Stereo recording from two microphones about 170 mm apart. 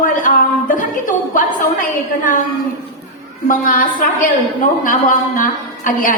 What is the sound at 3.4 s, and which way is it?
A woman's voice, 55° left (ahead or behind).